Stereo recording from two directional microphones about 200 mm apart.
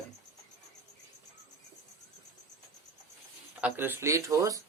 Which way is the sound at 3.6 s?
10° right (ahead or behind).